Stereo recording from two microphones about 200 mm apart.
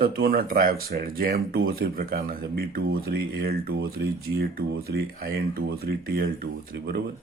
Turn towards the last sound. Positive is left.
turn(degrees=-45)  # may be behind; listen again after turning